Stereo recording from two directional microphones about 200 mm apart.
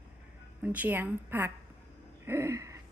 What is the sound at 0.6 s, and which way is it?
Speech, 10° right (ahead or behind).